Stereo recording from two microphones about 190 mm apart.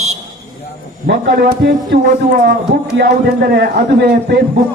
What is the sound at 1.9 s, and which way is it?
A man's voice, 50° right (ahead or behind).